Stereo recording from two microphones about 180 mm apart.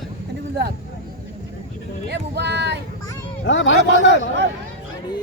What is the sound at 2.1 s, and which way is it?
Speech, 70° right (ahead or behind).